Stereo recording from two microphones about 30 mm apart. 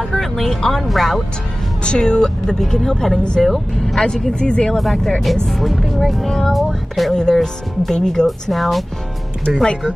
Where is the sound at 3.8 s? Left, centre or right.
Centre.